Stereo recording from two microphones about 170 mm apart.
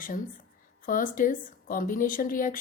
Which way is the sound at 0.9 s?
55° left (ahead or behind).